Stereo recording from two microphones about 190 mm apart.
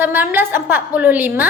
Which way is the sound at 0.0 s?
10° right (ahead or behind).